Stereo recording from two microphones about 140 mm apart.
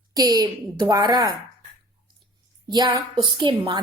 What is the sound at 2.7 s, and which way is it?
A woman's voice, 30° right (ahead or behind).